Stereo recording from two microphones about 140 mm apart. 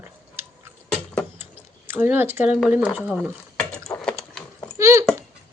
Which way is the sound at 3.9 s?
15° left (ahead or behind).